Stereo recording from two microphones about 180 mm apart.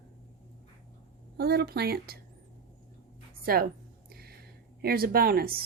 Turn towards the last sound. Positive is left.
turn(degrees=-55)  # may be behind; listen again after turning